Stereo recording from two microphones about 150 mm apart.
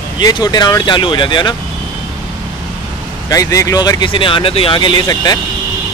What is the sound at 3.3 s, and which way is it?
Speech, 20° left (ahead or behind).